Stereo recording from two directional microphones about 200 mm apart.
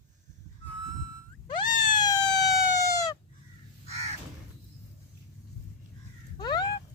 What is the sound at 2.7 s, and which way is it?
Chicken, 15° left (ahead or behind).